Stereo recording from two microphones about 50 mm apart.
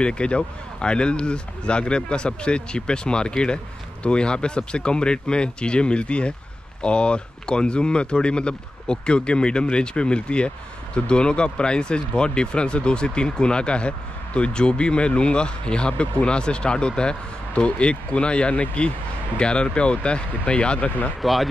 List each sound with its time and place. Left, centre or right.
0.0 s speech: centre
21.2 s speech: centre